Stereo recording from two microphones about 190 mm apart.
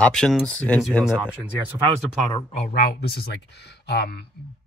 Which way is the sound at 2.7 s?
55° left (ahead or behind).